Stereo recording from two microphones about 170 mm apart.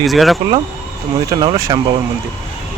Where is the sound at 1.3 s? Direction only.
20° right (ahead or behind).